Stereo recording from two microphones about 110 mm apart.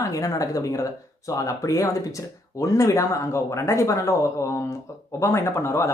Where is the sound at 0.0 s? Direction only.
30° left (ahead or behind).